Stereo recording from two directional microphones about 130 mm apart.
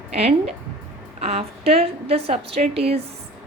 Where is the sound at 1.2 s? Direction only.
55° right (ahead or behind).